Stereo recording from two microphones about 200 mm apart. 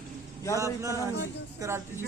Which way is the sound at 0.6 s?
15° right (ahead or behind).